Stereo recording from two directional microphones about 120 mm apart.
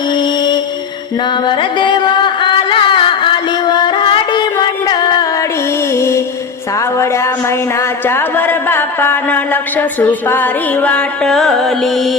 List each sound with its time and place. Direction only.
0.1 s music: 35° left (ahead or behind)
5.9 s music: 25° left (ahead or behind)
6.7 s a sound: 25° left (ahead or behind); by 12.1 s centre (ahead or behind)